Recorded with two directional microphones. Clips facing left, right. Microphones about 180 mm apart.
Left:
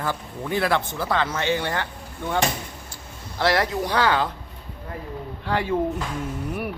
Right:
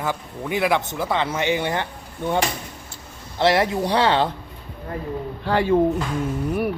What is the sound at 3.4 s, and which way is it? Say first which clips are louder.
Speech: right 3 dB; 20° right (ahead or behind).